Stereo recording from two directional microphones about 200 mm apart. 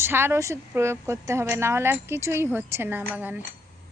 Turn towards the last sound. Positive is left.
turn(degrees=-10)  # may be behind; listen again after turning